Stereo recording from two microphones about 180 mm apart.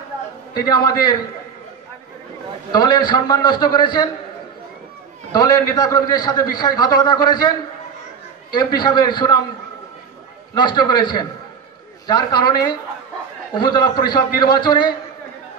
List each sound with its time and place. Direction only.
0.6 s a man's voice: 25° left (ahead or behind)
2.7 s a man's voice: 25° left (ahead or behind)
5.3 s a man's voice: 20° left (ahead or behind)
10.5 s a man's voice: 25° left (ahead or behind)
13.8 s a man's voice: 25° left (ahead or behind)